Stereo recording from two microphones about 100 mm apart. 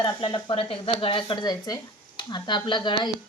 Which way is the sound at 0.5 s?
65° left (ahead or behind).